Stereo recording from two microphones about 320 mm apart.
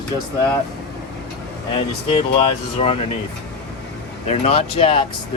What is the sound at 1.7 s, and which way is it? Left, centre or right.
Speech, centre.